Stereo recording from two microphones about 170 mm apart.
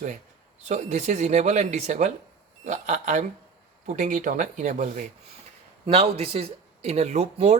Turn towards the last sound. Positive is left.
turn(degrees=-40)  # may be behind; listen again after turning